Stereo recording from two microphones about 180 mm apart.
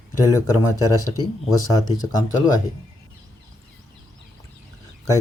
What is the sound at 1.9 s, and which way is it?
Speech, 20° left (ahead or behind).